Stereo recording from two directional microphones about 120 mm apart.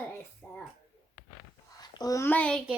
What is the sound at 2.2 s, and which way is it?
Speech, 10° left (ahead or behind).